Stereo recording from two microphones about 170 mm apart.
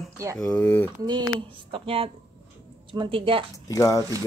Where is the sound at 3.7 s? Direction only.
20° left (ahead or behind).